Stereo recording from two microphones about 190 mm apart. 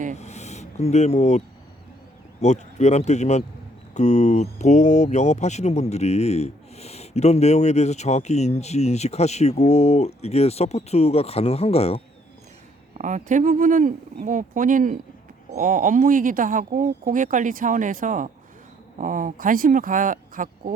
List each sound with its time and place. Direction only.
0.2 s speech: 35° left (ahead or behind)
2.4 s speech: 35° left (ahead or behind)
13.0 s speech: 40° right (ahead or behind)